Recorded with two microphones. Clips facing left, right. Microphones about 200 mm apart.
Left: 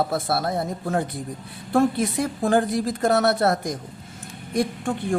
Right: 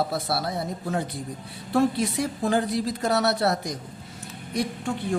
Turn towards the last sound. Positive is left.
turn(degrees=50)  # may be behind; listen again after turning